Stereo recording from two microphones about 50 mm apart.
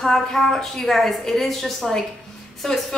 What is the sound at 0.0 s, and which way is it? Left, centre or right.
A woman's voice, centre.